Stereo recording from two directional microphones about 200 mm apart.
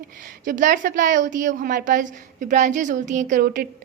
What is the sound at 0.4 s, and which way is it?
A woman's voice, 40° right (ahead or behind).